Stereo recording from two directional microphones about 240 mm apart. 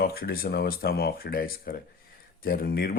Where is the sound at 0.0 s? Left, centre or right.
Left.